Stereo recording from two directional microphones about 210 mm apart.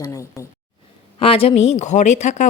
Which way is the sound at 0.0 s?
15° left (ahead or behind).